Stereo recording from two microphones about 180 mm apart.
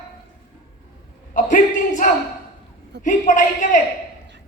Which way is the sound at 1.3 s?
45° left (ahead or behind).